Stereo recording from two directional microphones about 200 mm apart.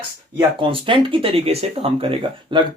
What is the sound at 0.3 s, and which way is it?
Speech, 25° right (ahead or behind).